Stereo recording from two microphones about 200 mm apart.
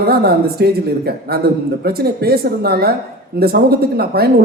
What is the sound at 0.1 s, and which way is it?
Speech, 50° right (ahead or behind).